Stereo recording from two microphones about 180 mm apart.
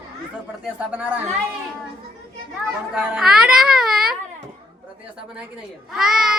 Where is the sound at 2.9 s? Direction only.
5° right (ahead or behind).